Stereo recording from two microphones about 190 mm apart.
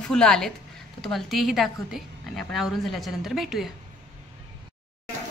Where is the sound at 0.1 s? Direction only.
5° left (ahead or behind).